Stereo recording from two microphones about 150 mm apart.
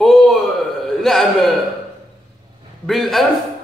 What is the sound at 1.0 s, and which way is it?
Speech, centre (ahead or behind).